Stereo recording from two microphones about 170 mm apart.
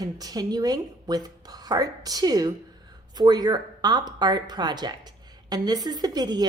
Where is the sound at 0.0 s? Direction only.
20° right (ahead or behind).